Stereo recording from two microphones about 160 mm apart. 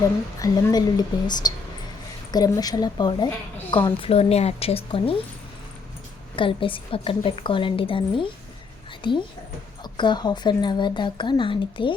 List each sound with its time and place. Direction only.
0.3 s a woman's voice: 20° left (ahead or behind)
6.3 s a woman's voice: 35° left (ahead or behind)